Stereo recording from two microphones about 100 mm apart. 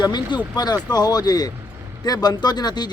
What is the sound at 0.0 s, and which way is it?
Speech, 45° left (ahead or behind).